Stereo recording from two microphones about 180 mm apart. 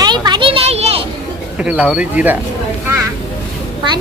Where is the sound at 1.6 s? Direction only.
5° right (ahead or behind).